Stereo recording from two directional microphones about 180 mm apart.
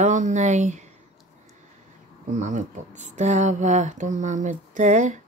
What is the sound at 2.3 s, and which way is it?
Speech, 40° right (ahead or behind).